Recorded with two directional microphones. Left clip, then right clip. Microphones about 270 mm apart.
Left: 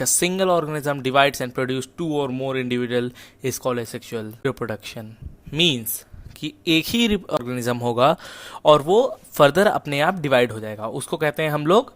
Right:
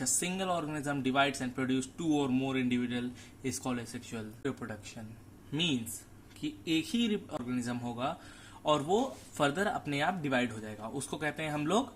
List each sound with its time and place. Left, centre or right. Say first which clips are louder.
0.2 s speech: left 17 dB; left